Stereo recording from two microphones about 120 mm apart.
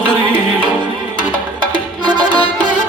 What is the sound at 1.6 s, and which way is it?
Music, 40° right (ahead or behind).